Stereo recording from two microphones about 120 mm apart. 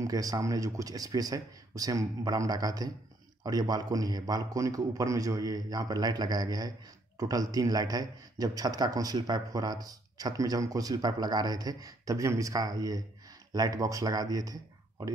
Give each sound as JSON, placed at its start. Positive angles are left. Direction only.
{"t": 0.0, "sound": "a man's voice", "side_deg": -30}